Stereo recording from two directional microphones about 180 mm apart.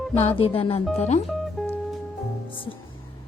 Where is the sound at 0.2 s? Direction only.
35° left (ahead or behind).